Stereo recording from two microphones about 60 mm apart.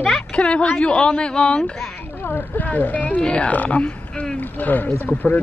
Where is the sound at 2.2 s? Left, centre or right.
Left.